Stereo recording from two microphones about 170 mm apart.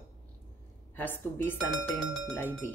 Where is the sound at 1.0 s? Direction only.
10° left (ahead or behind).